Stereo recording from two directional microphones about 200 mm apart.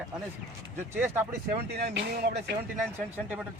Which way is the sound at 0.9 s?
10° right (ahead or behind).